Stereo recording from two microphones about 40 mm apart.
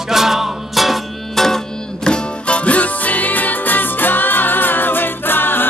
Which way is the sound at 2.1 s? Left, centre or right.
Left.